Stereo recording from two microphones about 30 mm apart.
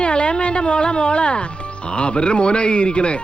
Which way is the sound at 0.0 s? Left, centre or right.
Left.